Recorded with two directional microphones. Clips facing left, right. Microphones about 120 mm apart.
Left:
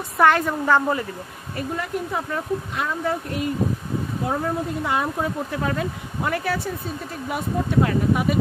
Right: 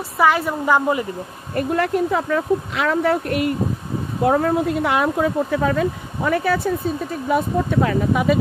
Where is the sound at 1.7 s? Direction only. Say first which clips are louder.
Right 8 dB; 85° right.